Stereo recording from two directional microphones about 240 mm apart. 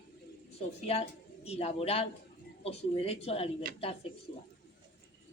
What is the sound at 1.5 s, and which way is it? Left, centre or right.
Speech, left.